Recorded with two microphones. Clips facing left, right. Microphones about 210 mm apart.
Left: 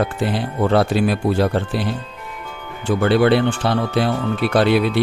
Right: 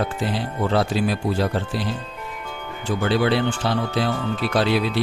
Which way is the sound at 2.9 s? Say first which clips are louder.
Left 5 dB; 60° left (ahead or behind).